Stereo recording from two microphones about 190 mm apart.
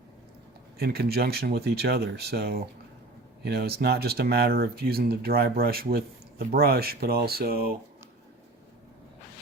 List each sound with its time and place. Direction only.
0.8 s speech: 55° right (ahead or behind)